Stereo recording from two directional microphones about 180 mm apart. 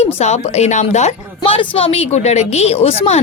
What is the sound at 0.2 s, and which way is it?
A woman's voice, 35° left (ahead or behind).